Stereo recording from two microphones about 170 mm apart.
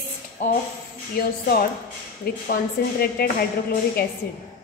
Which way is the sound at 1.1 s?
60° left (ahead or behind).